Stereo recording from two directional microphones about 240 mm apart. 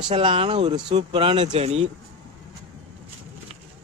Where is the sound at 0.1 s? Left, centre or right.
Right.